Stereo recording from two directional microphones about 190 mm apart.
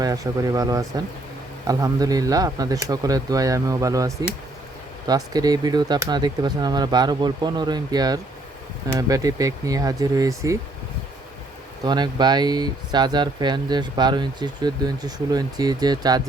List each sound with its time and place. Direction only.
0.0 s speech: 20° right (ahead or behind)
11.9 s speech: 20° right (ahead or behind)